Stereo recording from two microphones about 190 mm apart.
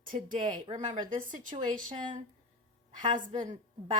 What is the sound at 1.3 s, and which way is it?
Speech, 45° right (ahead or behind).